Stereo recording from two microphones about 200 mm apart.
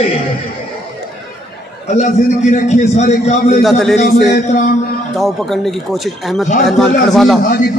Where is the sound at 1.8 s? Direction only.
35° left (ahead or behind).